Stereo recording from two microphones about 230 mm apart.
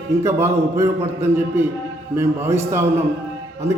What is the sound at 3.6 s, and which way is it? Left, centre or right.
Speech, right.